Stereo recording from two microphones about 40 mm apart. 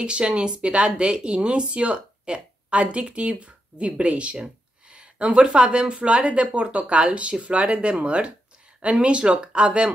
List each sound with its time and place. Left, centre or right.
0.0 s speech: right